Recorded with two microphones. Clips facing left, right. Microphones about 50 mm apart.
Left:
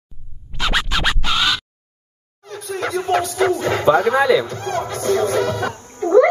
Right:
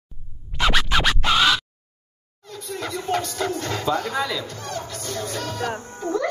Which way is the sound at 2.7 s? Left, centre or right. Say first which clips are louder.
Left 7 dB; left.